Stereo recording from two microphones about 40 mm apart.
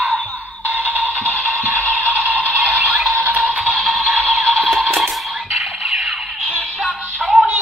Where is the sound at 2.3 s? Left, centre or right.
Left.